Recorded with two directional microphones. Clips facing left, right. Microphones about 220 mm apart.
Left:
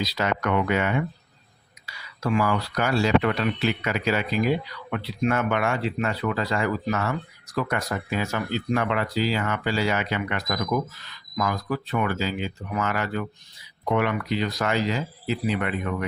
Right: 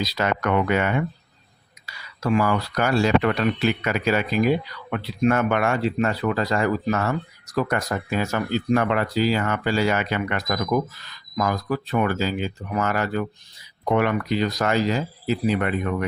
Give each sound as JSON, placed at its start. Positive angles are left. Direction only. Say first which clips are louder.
{"t": 0.0, "sound": "speech", "louder": "right 2 dB", "side_deg": -50}
{"t": 2.3, "sound": "speech", "louder": "right 3 dB", "side_deg": -45}